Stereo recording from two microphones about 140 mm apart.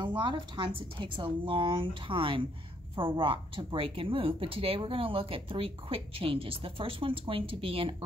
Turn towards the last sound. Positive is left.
turn(degrees=-40)  # may be behind; listen again after turning